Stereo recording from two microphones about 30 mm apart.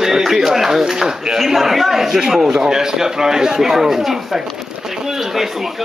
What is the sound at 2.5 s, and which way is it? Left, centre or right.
A man's voice, right.